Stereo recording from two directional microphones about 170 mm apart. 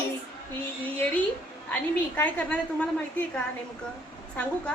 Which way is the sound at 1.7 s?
10° left (ahead or behind).